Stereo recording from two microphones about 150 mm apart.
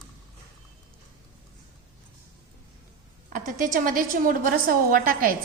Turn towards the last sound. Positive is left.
turn(degrees=-75)  # may be behind; listen again after turning